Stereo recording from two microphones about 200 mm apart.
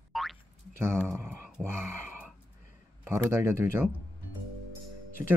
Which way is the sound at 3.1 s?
15° right (ahead or behind).